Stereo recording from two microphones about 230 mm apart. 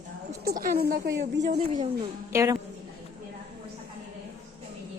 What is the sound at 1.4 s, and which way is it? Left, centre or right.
Speech, right.